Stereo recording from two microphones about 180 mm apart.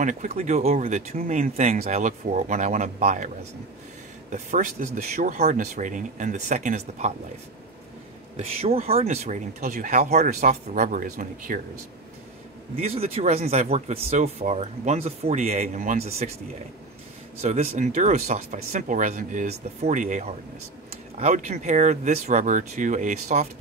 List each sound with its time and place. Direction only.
0.0 s speech: 45° right (ahead or behind)
4.3 s speech: 45° right (ahead or behind)
8.4 s speech: 35° right (ahead or behind); by 11.6 s 50° right (ahead or behind)
12.7 s speech: 35° right (ahead or behind)
17.4 s speech: 40° right (ahead or behind)